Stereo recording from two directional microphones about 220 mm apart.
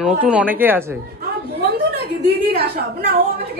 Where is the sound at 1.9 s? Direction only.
45° right (ahead or behind).